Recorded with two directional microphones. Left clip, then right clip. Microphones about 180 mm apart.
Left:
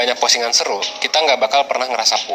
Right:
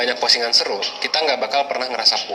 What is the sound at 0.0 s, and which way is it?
A man's voice, 35° left (ahead or behind).